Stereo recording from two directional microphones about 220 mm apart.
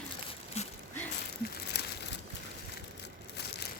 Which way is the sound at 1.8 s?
50° left (ahead or behind).